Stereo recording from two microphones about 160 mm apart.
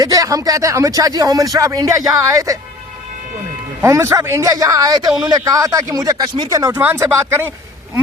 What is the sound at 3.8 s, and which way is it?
A man's voice, 15° right (ahead or behind).